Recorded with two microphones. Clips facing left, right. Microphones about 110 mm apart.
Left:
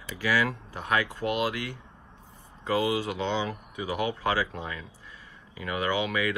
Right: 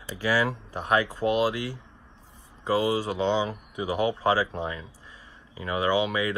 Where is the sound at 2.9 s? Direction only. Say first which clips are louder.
Right 2 dB; 35° right (ahead or behind).